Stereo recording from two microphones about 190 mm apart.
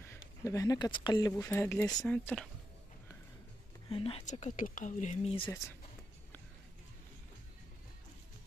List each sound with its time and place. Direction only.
0.4 s speech: 15° left (ahead or behind)
3.9 s speech: 30° left (ahead or behind)